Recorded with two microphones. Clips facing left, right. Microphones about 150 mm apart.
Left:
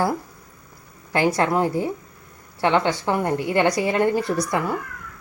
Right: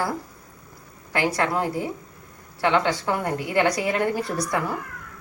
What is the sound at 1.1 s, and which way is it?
A woman's voice, 25° left (ahead or behind).